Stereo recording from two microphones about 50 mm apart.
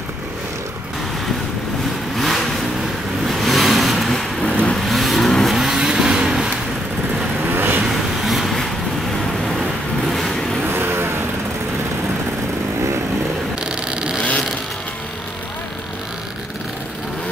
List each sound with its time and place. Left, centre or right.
2.1 s vehicle: centre
4.1 s vehicle: centre
4.8 s vehicle: centre
7.4 s vehicle: right
8.3 s vehicle: centre
10.7 s vehicle: right
13.7 s vehicle: centre